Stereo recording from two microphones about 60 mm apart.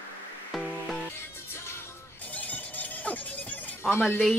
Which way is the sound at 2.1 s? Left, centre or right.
Left.